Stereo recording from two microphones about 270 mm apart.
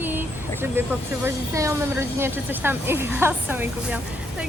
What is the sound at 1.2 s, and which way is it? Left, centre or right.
Speech, centre.